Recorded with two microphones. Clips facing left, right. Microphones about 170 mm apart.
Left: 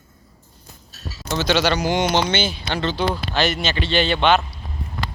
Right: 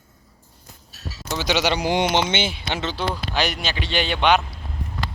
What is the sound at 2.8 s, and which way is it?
A man's voice, 5° right (ahead or behind).